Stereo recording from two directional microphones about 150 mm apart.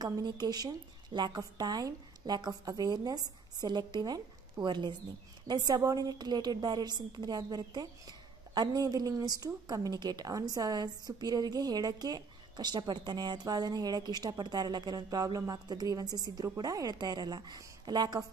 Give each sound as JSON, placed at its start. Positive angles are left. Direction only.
{"t": 0.0, "sound": "a woman's voice", "side_deg": -25}